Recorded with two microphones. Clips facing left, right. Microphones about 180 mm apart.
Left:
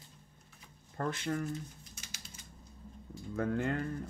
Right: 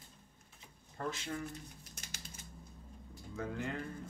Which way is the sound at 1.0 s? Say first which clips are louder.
Left 5 dB; 55° left (ahead or behind).